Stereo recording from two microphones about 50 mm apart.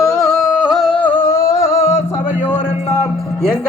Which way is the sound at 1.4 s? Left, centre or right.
Left.